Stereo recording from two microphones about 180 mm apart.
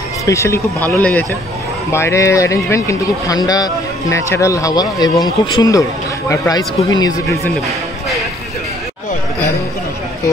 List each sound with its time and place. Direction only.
0.2 s speech: 15° left (ahead or behind)
7.4 s music: centre (ahead or behind)